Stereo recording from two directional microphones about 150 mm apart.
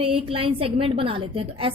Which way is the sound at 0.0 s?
40° right (ahead or behind).